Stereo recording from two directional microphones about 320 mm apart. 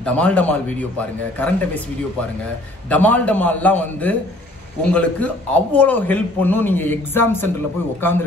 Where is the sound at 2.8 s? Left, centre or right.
Centre.